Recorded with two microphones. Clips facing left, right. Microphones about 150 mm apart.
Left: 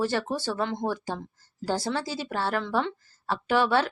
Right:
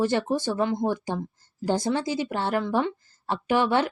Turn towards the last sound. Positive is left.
turn(degrees=-15)  # may be behind; listen again after turning